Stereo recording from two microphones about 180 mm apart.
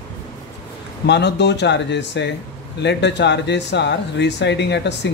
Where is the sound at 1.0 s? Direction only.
75° left (ahead or behind).